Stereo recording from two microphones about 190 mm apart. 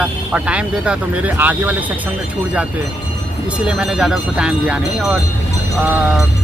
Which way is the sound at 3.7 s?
5° right (ahead or behind).